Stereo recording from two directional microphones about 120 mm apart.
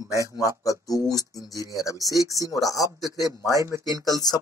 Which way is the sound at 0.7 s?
30° left (ahead or behind).